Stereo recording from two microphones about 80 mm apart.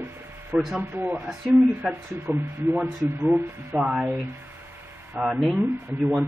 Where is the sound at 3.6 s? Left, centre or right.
Centre.